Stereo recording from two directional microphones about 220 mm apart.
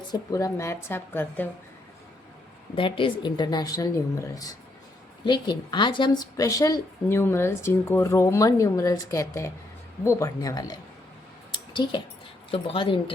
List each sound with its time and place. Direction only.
0.1 s a woman's voice: 15° left (ahead or behind)
2.7 s a woman's voice: 25° left (ahead or behind)